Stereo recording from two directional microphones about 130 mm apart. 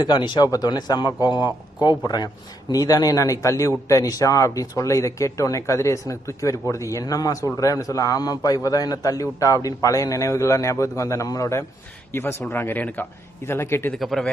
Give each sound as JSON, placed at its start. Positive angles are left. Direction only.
{"t": 0.0, "sound": "a man's voice", "side_deg": 35}
{"t": 13.9, "sound": "speech", "side_deg": 0}